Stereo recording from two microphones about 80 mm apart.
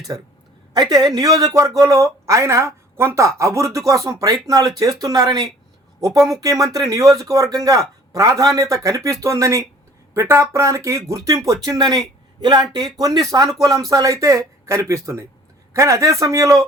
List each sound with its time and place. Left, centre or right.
0.1 s a man's voice: right
12.7 s a man's voice: right